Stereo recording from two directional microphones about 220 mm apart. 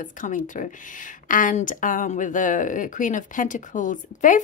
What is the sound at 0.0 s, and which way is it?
Speech, 35° left (ahead or behind).